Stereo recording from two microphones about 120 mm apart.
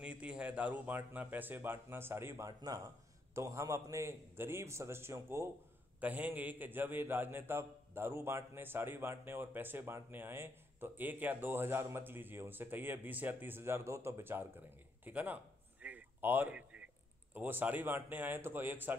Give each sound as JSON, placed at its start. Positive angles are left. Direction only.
{"t": 0.0, "sound": "a man's voice", "side_deg": -10}
{"t": 5.9, "sound": "a man's voice", "side_deg": -10}